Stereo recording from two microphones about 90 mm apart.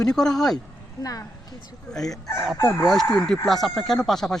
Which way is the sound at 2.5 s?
30° left (ahead or behind).